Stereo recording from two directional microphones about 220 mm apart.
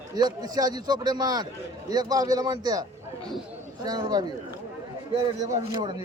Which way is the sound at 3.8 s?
20° right (ahead or behind).